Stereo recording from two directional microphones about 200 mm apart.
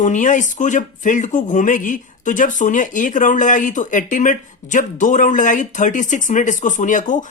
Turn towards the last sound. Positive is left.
turn(degrees=40)  # may be behind; listen again after turning